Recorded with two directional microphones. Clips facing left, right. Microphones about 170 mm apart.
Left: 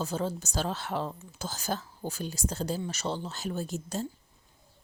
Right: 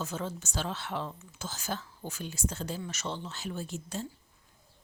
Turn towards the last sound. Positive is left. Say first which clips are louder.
# left 4 dB
turn(degrees=40)  # may be behind; listen again after turning